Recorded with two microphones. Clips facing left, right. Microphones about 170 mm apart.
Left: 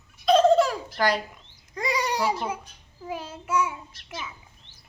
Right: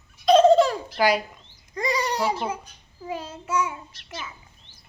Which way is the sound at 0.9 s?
10° right (ahead or behind).